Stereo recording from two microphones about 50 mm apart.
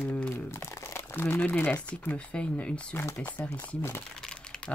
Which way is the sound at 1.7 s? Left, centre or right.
Left.